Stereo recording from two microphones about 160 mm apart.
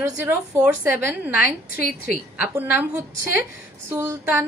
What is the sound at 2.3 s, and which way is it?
A woman's voice, 10° right (ahead or behind).